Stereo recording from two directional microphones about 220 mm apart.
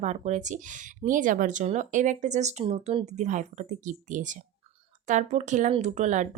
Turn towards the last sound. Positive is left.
turn(degrees=-35)  # may be behind; listen again after turning